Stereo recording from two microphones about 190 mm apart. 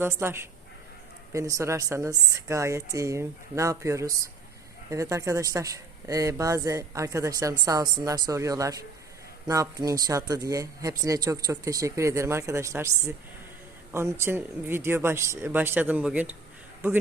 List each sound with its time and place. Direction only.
0.0 s speech: 10° right (ahead or behind)